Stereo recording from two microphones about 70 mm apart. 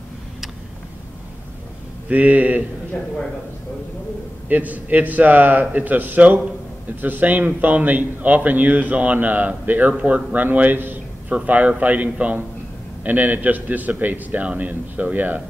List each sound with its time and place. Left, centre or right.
2.0 s a man's voice: right
4.5 s a man's voice: right